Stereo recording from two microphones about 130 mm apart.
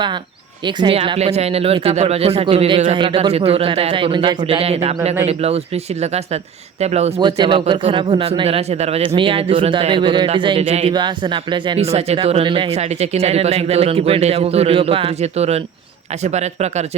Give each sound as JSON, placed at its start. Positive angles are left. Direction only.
{"t": 0.6, "sound": "a man's voice", "side_deg": -35}
{"t": 0.9, "sound": "a man's voice", "side_deg": -45}
{"t": 4.6, "sound": "speech", "side_deg": -55}
{"t": 7.2, "sound": "a man's voice", "side_deg": -35}